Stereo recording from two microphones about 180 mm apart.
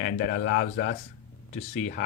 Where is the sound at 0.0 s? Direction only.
50° left (ahead or behind).